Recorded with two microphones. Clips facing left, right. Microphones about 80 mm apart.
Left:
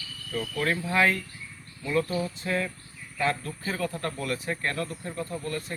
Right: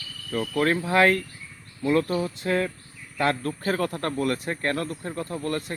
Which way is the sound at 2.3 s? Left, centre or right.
Right.